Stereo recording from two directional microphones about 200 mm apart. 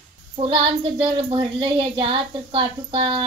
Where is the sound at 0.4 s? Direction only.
25° right (ahead or behind).